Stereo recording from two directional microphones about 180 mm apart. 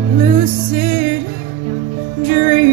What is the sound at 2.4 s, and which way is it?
Music, 35° right (ahead or behind).